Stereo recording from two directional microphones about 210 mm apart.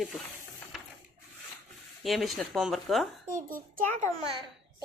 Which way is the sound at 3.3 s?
40° right (ahead or behind).